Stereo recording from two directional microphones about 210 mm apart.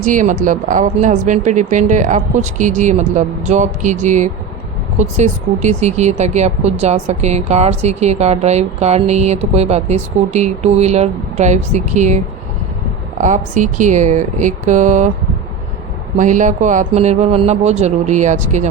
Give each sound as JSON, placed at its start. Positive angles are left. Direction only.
{"t": 0.0, "sound": "speech", "side_deg": -40}
{"t": 16.1, "sound": "speech", "side_deg": -35}